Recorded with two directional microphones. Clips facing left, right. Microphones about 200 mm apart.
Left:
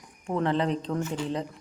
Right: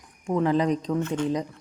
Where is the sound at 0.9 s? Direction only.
5° left (ahead or behind).